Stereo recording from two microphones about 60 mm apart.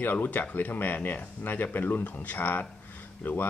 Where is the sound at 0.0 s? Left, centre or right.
Left.